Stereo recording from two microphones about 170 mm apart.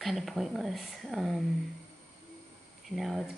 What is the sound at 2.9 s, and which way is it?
Speech, centre (ahead or behind).